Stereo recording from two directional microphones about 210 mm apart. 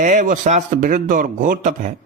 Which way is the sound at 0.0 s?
35° right (ahead or behind).